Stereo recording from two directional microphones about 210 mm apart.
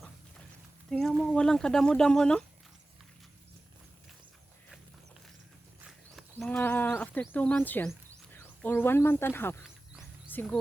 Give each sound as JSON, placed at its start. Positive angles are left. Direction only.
{"t": 0.9, "sound": "speech", "side_deg": 0}
{"t": 5.8, "sound": "speech", "side_deg": 0}